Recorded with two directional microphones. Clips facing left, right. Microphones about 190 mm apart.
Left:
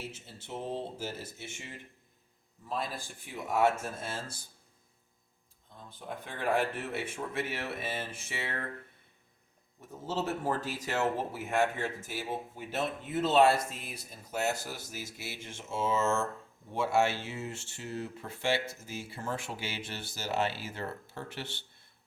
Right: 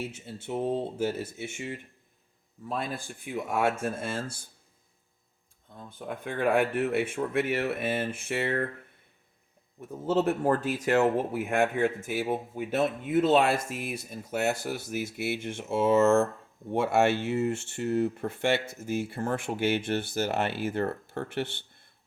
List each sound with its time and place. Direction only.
0.1 s speech: 55° right (ahead or behind)
6.2 s speech: 55° right (ahead or behind)
10.1 s speech: 55° right (ahead or behind)
13.5 s speech: 65° right (ahead or behind)